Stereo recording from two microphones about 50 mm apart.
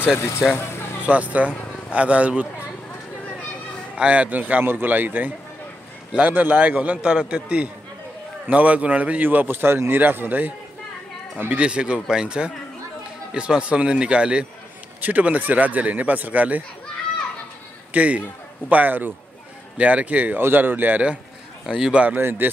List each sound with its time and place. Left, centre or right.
0.2 s speech: left
0.6 s a sound: left
1.0 s a man's voice: right
3.9 s a man's voice: right
11.6 s a man's voice: right
15.0 s a man's voice: right
17.9 s a man's voice: right
19.8 s a man's voice: right
20.3 s a man's voice: right
21.6 s a man's voice: centre
21.9 s a man's voice: right
22.2 s a man's voice: right